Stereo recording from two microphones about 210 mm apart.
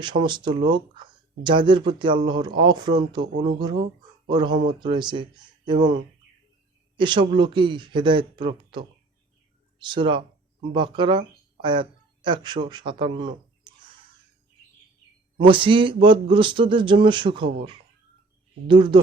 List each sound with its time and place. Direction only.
0.0 s speech: 20° right (ahead or behind)
7.0 s speech: 20° right (ahead or behind)
15.4 s speech: 25° right (ahead or behind)